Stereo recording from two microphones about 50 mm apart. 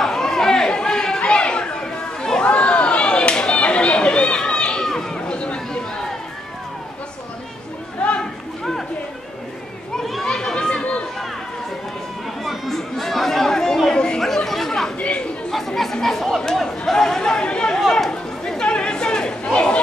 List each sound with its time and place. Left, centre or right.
0.0 s chatter: centre
4.8 s a sound: centre
8.2 s a sound: centre
10.2 s chatter: centre
12.4 s chatter: centre
15.0 s chatter: left
15.5 s chatter: centre; by 19.8 s left